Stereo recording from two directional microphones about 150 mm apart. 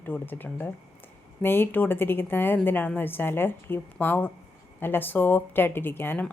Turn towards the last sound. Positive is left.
turn(degrees=15)  # may be behind; listen again after turning